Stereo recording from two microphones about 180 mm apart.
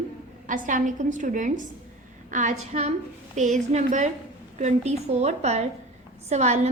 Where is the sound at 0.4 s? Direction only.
45° right (ahead or behind).